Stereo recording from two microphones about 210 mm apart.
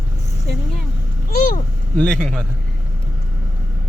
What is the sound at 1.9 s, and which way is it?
Speech, 5° left (ahead or behind).